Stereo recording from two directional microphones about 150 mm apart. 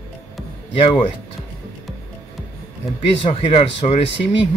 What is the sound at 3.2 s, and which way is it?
Speech, 40° left (ahead or behind).